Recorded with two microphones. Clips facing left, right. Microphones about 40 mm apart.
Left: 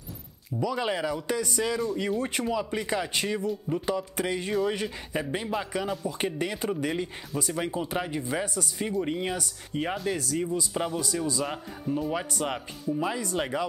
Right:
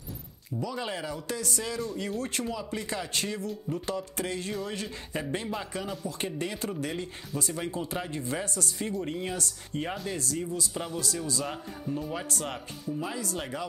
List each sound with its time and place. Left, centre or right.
0.7 s speech: left; by 10.2 s centre
10.3 s speech: left